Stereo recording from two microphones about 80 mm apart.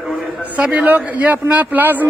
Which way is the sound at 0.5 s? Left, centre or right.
Centre.